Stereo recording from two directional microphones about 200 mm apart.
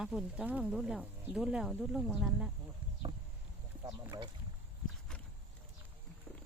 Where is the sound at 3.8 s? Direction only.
20° right (ahead or behind).